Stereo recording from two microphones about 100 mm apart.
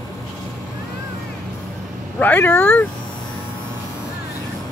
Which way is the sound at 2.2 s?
20° left (ahead or behind).